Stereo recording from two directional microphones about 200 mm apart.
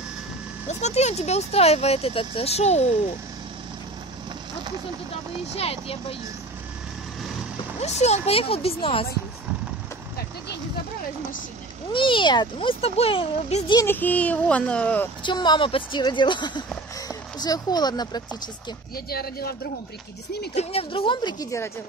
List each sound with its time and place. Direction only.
0.7 s speech: 35° left (ahead or behind)
5.6 s a child's voice: 30° left (ahead or behind)
7.8 s a child's voice: 35° left (ahead or behind)
11.9 s a child's voice: 25° left (ahead or behind)
13.7 s a child's voice: 10° left (ahead or behind)
15.2 s a child's voice: 20° left (ahead or behind)
18.9 s speech: 50° left (ahead or behind)
20.5 s a child's voice: 30° left (ahead or behind)